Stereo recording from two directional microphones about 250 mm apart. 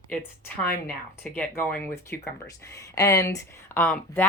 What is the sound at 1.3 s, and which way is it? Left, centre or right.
Speech, centre.